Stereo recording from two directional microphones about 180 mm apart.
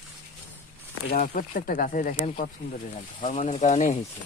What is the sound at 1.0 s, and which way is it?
Speech, 50° left (ahead or behind).